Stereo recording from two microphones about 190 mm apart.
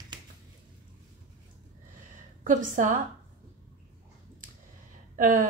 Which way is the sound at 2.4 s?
40° right (ahead or behind).